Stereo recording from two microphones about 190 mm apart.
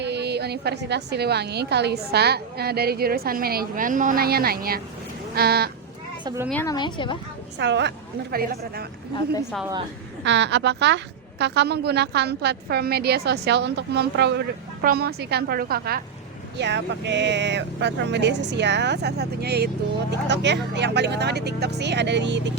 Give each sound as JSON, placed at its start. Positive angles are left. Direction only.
{"t": 0.0, "sound": "speech", "side_deg": -60}
{"t": 6.2, "sound": "a woman's voice", "side_deg": -15}
{"t": 6.5, "sound": "a woman's voice", "side_deg": 10}
{"t": 6.7, "sound": "a woman's voice", "side_deg": 25}
{"t": 7.6, "sound": "speech", "side_deg": -65}
{"t": 10.2, "sound": "a woman's voice", "side_deg": -65}
{"t": 16.6, "sound": "speech", "side_deg": -65}